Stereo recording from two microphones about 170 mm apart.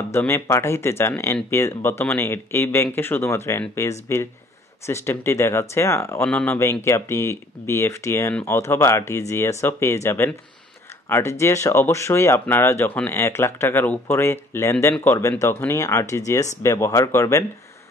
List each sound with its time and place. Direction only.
0.1 s speech: 15° left (ahead or behind)